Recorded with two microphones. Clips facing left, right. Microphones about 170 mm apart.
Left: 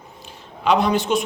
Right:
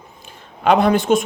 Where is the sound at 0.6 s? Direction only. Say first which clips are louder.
Right 4 dB; 55° right (ahead or behind).